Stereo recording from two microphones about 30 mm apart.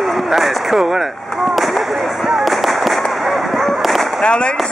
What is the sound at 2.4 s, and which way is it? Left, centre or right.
Firecracker, centre.